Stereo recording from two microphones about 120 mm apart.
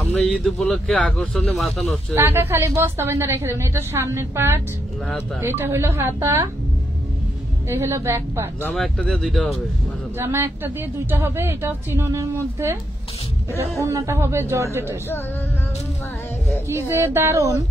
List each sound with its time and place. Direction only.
0.2 s a man's voice: centre (ahead or behind)
2.1 s a woman's voice: 20° right (ahead or behind)
7.7 s a woman's voice: 25° right (ahead or behind)
8.7 s a man's voice: 5° left (ahead or behind)
10.1 s a woman's voice: 20° right (ahead or behind)
13.7 s a woman's voice: 25° right (ahead or behind)
16.8 s a woman's voice: 20° right (ahead or behind)